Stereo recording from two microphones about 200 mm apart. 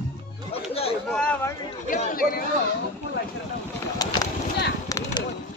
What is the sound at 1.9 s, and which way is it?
Speech, 45° left (ahead or behind).